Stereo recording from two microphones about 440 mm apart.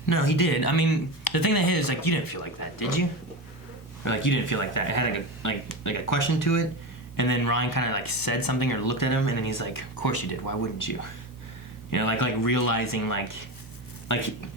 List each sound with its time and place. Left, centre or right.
0.0 s speech: left